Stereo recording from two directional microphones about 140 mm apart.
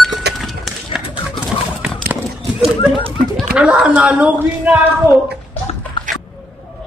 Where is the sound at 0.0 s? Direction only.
Centre (ahead or behind).